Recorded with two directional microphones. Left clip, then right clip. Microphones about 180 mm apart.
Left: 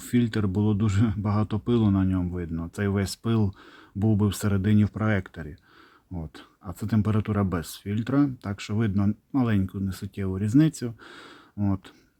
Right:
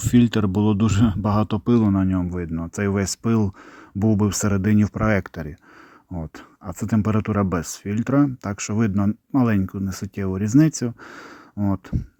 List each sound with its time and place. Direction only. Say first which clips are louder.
0.0 s speech: right 7 dB; 40° right (ahead or behind)
1.8 s speech: right 4 dB; 20° right (ahead or behind)